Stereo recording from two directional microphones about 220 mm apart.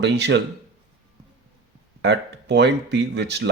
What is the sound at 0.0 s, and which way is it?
Speech, 50° right (ahead or behind).